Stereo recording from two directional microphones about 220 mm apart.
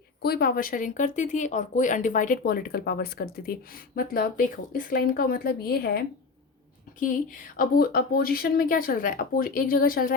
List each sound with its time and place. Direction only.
0.2 s speech: 45° left (ahead or behind)
7.5 s speech: 40° left (ahead or behind)